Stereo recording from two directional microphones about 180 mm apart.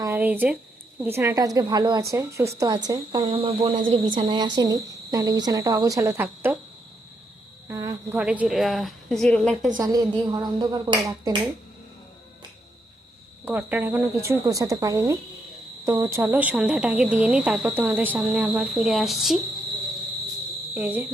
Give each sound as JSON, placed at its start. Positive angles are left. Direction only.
{"t": 0.0, "sound": "speech", "side_deg": -10}
{"t": 3.2, "sound": "speech", "side_deg": -35}
{"t": 7.7, "sound": "a woman's voice", "side_deg": -15}
{"t": 9.7, "sound": "speech", "side_deg": -20}
{"t": 13.4, "sound": "speech", "side_deg": -10}
{"t": 20.7, "sound": "speech", "side_deg": -10}